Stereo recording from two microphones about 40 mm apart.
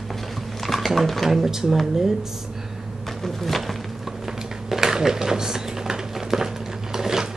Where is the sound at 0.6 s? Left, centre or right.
Centre.